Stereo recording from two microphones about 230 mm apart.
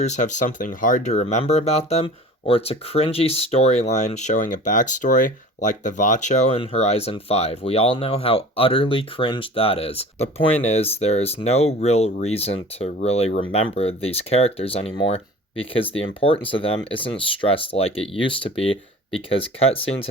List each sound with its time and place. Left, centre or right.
0.0 s speech: left